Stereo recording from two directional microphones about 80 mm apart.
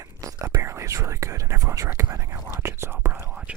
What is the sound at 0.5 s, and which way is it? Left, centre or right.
Whispering, right.